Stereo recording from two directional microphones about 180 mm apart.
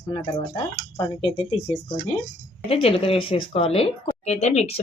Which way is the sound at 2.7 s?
30° left (ahead or behind).